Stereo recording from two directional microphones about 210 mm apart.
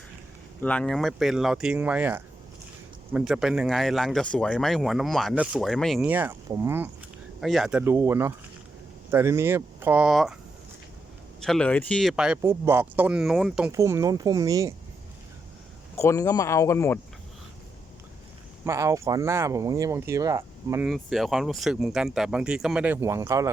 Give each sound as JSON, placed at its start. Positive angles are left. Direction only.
{"t": 0.6, "sound": "speech", "side_deg": 5}
{"t": 11.3, "sound": "speech", "side_deg": 5}
{"t": 13.7, "sound": "speech", "side_deg": -15}
{"t": 16.0, "sound": "speech", "side_deg": 15}
{"t": 18.6, "sound": "speech", "side_deg": -15}
{"t": 20.8, "sound": "speech", "side_deg": 0}